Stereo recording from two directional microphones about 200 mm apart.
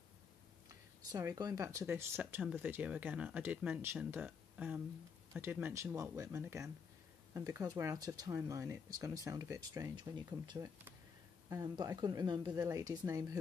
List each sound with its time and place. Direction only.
1.1 s speech: 20° right (ahead or behind)